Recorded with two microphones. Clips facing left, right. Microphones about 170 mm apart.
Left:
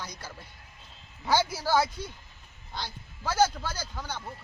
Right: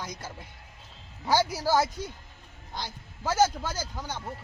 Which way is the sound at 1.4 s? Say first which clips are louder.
Right 3 dB; 40° right (ahead or behind).